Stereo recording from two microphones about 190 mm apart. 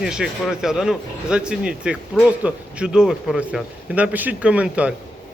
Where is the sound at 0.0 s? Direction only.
Centre (ahead or behind).